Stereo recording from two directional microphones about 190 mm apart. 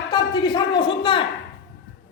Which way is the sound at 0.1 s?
25° left (ahead or behind).